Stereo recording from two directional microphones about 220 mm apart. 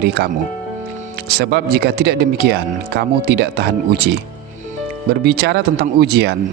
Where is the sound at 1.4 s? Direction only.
45° right (ahead or behind).